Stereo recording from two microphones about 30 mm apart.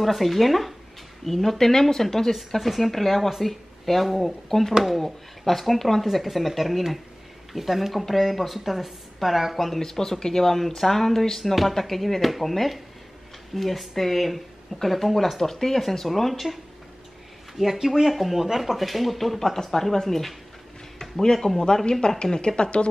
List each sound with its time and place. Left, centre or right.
0.0 s speech: centre
2.3 s speech: centre
9.8 s speech: centre
17.7 s speech: centre
18.1 s speech: centre
21.0 s a sound: centre
21.5 s speech: left
22.2 s speech: left